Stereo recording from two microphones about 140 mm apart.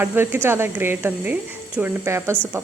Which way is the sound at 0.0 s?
15° right (ahead or behind).